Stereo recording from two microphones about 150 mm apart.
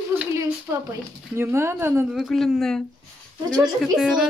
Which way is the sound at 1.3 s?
15° right (ahead or behind).